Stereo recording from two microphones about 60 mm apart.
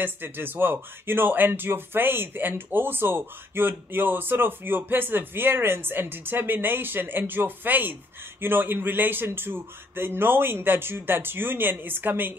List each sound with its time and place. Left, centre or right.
0.0 s speech: right